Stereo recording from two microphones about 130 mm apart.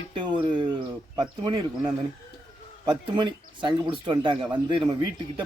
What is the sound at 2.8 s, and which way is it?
Speech, 35° right (ahead or behind).